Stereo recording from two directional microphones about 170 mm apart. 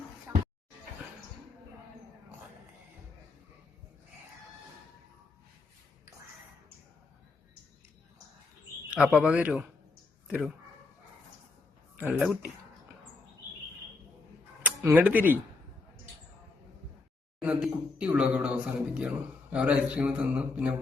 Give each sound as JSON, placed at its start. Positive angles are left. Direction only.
{"t": 9.1, "sound": "speech", "side_deg": -5}
{"t": 11.9, "sound": "speech", "side_deg": -10}
{"t": 14.6, "sound": "speech", "side_deg": -10}
{"t": 17.4, "sound": "speech", "side_deg": -5}